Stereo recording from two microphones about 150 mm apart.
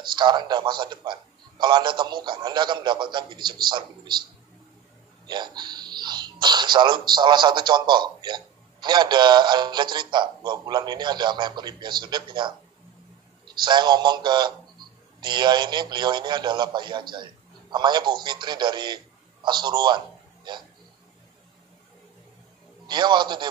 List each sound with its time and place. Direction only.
0.1 s a man's voice: 30° right (ahead or behind)
5.2 s a man's voice: 30° right (ahead or behind)
22.8 s a man's voice: 30° right (ahead or behind)